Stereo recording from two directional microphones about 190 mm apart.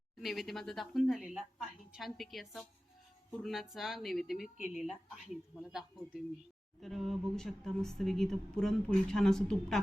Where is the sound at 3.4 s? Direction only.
Centre (ahead or behind).